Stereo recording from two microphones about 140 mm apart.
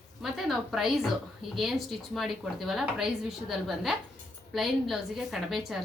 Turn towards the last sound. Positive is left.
turn(degrees=0)  # may be behind; listen again after turning